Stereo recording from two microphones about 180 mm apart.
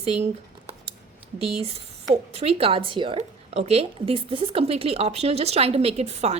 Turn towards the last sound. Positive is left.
turn(degrees=-35)  # may be behind; listen again after turning